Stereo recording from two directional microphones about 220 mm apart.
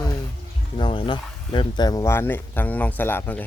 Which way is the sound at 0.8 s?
20° left (ahead or behind).